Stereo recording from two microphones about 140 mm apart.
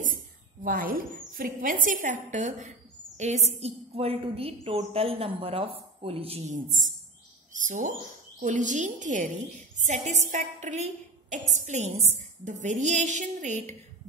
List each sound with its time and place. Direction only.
0.7 s a woman's voice: 90° right; by 6.8 s 60° right (ahead or behind)
7.5 s a sound: 70° right (ahead or behind)
8.4 s a woman's voice: 60° right (ahead or behind)